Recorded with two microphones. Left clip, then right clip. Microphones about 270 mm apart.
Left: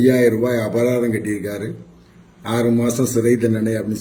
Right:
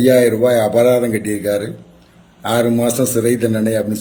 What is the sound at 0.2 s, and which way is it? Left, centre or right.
Speech, centre.